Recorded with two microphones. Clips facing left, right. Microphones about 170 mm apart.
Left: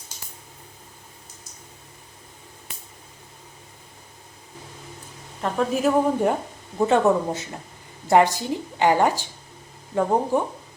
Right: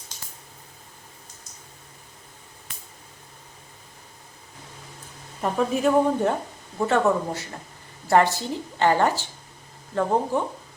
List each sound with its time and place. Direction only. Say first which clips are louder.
5.4 s a woman's voice: even; centre (ahead or behind)
6.7 s a woman's voice: left 3 dB; 20° left (ahead or behind)